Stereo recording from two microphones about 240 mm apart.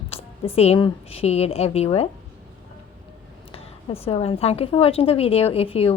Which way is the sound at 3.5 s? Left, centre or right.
Left.